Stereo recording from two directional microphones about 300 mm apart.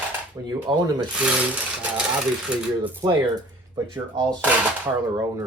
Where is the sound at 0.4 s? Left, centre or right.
Centre.